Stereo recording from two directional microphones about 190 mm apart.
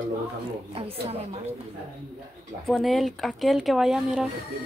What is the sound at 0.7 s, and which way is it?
Speech, 30° right (ahead or behind).